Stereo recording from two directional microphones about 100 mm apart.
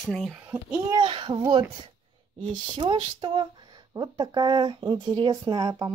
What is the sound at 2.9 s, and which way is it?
Speech, 55° right (ahead or behind).